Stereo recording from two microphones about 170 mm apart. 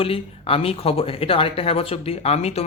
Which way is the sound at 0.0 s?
35° left (ahead or behind).